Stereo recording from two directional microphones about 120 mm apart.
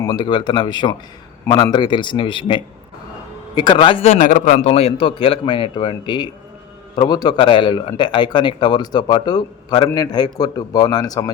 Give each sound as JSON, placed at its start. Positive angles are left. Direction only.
{"t": 0.0, "sound": "a man's voice", "side_deg": 35}
{"t": 4.0, "sound": "a man's voice", "side_deg": 80}